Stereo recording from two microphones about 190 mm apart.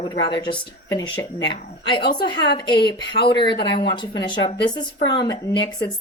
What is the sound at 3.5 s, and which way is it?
Speech, 60° left (ahead or behind).